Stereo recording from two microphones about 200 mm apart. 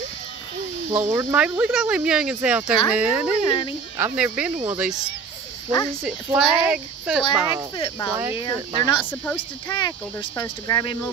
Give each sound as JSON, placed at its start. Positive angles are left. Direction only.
{"t": 0.9, "sound": "speech", "side_deg": -10}
{"t": 3.4, "sound": "speech", "side_deg": 25}
{"t": 4.0, "sound": "speech", "side_deg": -5}
{"t": 7.7, "sound": "speech", "side_deg": 25}
{"t": 8.1, "sound": "speech", "side_deg": -10}
{"t": 8.4, "sound": "speech", "side_deg": 20}
{"t": 9.1, "sound": "speech", "side_deg": 10}
{"t": 9.7, "sound": "speech", "side_deg": 20}